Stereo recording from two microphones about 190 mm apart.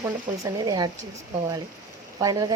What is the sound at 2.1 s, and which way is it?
Speech, 20° right (ahead or behind).